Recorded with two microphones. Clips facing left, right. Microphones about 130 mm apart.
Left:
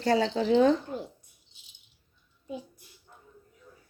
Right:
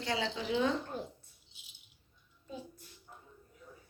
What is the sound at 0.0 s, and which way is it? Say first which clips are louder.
Speech: left 10 dB; 45° left (ahead or behind).